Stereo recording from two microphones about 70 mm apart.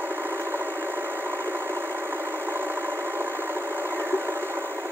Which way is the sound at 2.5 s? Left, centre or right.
Right.